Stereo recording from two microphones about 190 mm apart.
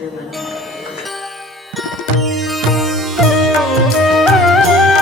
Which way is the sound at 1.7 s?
Centre (ahead or behind).